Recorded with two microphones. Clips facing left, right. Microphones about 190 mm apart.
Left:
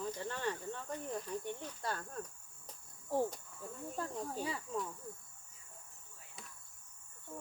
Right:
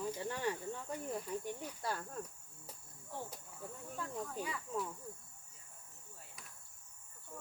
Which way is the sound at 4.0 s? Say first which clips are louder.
Left 2 dB; 35° left (ahead or behind).